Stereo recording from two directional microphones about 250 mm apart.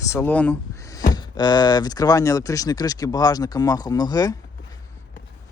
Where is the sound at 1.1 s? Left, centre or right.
Centre.